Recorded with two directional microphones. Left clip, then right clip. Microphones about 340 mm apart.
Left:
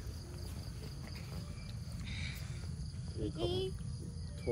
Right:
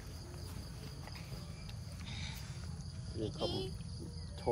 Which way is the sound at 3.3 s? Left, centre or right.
Centre.